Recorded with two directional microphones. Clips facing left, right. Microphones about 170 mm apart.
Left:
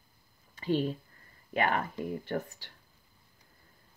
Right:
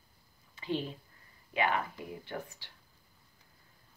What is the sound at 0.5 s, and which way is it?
Speech, 45° left (ahead or behind).